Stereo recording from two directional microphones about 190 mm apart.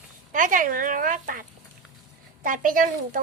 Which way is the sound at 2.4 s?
45° right (ahead or behind).